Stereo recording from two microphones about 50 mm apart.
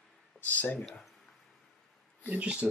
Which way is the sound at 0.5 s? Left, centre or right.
Left.